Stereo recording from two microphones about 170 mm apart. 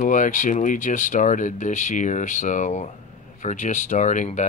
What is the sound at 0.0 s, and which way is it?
Speech, 50° left (ahead or behind).